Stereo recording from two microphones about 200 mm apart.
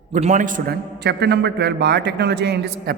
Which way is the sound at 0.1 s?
35° right (ahead or behind).